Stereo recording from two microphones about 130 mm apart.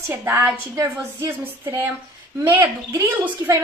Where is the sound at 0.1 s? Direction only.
15° right (ahead or behind).